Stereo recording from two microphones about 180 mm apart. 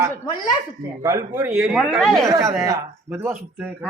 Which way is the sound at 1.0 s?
15° right (ahead or behind).